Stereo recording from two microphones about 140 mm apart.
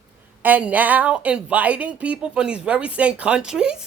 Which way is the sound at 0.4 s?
10° right (ahead or behind).